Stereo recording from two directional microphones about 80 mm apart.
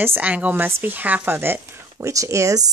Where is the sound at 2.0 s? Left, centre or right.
Right.